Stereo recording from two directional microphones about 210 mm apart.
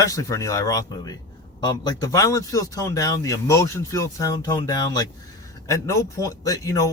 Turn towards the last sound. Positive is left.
turn(degrees=15)  # may be behind; listen again after turning